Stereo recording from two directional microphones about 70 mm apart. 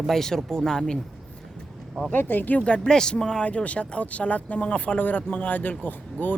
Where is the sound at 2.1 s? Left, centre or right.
Left.